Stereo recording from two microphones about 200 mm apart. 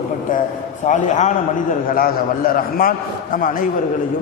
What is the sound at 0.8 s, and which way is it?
A man's voice, 35° left (ahead or behind).